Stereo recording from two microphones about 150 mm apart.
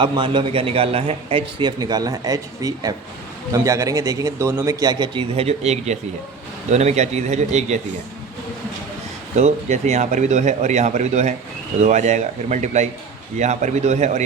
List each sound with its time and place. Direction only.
0.0 s a man's voice: 35° right (ahead or behind); by 7.8 s 50° right (ahead or behind)
9.4 s speech: 50° right (ahead or behind)